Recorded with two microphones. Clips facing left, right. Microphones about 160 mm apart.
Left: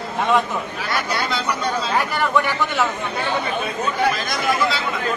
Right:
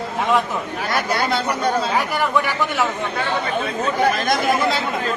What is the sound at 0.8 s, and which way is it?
Speech, 50° right (ahead or behind).